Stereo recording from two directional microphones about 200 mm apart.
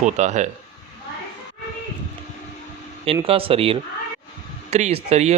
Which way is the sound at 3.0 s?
30° right (ahead or behind).